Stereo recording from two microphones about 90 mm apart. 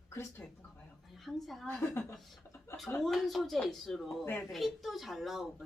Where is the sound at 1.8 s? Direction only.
30° left (ahead or behind).